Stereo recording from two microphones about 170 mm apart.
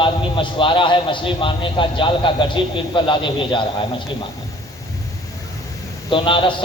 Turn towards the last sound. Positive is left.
turn(degrees=30)  # may be behind; listen again after turning